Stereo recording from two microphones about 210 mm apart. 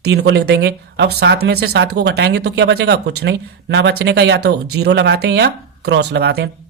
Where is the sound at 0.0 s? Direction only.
50° right (ahead or behind).